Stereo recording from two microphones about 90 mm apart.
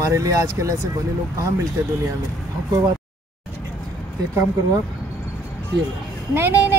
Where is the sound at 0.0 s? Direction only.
40° right (ahead or behind).